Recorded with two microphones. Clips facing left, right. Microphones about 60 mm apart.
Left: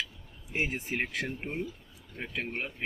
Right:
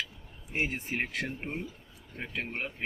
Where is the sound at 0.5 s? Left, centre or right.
Centre.